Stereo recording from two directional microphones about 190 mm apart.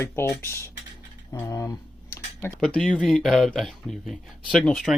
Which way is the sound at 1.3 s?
15° left (ahead or behind).